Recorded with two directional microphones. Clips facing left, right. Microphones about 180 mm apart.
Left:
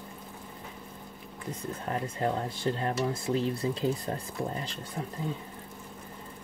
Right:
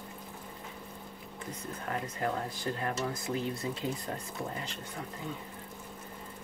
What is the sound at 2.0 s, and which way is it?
Speech, 30° left (ahead or behind).